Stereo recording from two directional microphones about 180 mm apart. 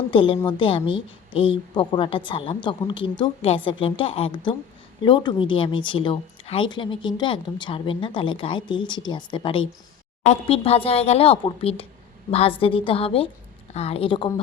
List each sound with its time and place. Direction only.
0.1 s speech: 30° left (ahead or behind)